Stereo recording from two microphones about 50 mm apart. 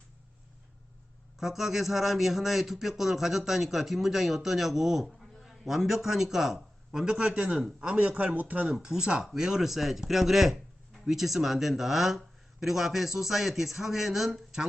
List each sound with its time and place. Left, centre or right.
1.4 s a man's voice: centre; by 8.7 s right
8.7 s speech: centre